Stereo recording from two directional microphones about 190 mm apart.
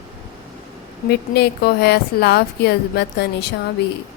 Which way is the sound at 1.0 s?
60° left (ahead or behind).